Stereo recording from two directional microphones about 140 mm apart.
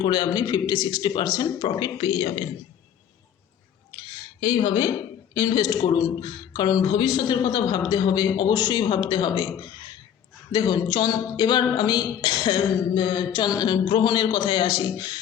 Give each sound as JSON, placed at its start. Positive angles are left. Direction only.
{"t": 0.0, "sound": "speech", "side_deg": 30}
{"t": 4.4, "sound": "speech", "side_deg": 30}